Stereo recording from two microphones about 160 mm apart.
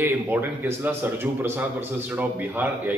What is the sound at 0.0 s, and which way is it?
Speech, 15° right (ahead or behind).